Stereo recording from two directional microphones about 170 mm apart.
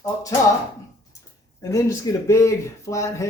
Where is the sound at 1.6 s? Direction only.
20° left (ahead or behind).